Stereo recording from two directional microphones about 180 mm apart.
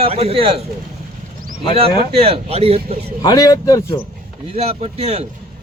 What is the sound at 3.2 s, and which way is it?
Speech, 20° left (ahead or behind).